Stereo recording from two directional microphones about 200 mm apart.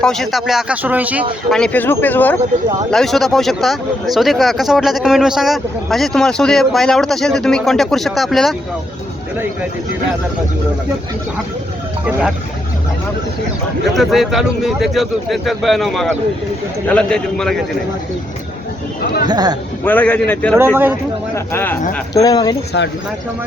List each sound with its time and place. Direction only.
0.0 s speech: centre (ahead or behind)
1.5 s speech: 5° left (ahead or behind)
13.9 s speech: centre (ahead or behind)
19.2 s speech: 20° right (ahead or behind)
19.8 s speech: 10° left (ahead or behind)
20.6 s speech: 10° right (ahead or behind)
21.3 s speech: 10° left (ahead or behind)